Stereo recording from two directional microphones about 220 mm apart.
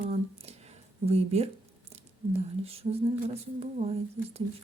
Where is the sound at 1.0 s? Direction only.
30° right (ahead or behind).